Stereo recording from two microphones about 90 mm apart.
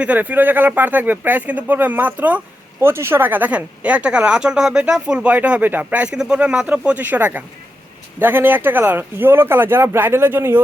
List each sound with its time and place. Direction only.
0.0 s speech: 15° right (ahead or behind)
2.8 s speech: 25° right (ahead or behind)